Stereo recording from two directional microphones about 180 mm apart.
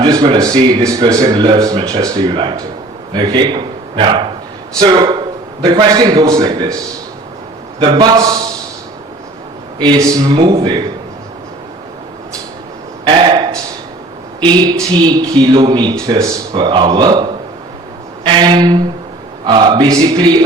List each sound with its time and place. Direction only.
0.0 s a man's voice: 25° right (ahead or behind)
7.8 s speech: 25° right (ahead or behind)
9.7 s speech: 25° right (ahead or behind)
13.1 s a sound: 25° right (ahead or behind)
14.4 s speech: 25° right (ahead or behind)